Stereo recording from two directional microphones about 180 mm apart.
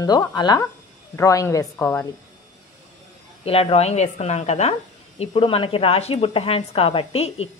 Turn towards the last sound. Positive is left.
turn(degrees=35)  # may be behind; listen again after turning